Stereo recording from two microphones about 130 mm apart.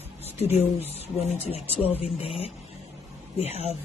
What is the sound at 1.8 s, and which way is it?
Speech, 50° left (ahead or behind).